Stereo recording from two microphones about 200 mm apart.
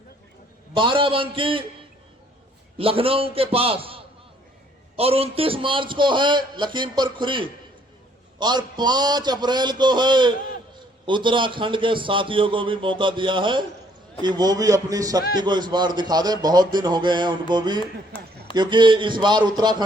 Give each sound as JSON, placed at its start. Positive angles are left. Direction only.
{"t": 0.7, "sound": "a man's voice", "side_deg": -25}
{"t": 2.7, "sound": "a man's voice", "side_deg": -30}
{"t": 17.7, "sound": "a man's voice", "side_deg": 25}
{"t": 18.5, "sound": "a man's voice", "side_deg": -20}